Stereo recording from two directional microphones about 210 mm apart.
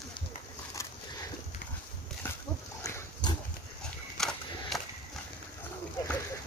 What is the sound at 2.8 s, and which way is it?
Dog, 15° left (ahead or behind).